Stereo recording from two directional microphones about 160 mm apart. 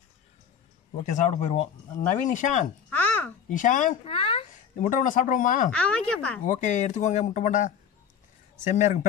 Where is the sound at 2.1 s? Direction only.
55° left (ahead or behind).